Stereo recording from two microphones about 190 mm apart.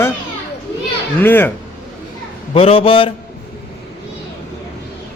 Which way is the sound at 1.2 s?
10° left (ahead or behind).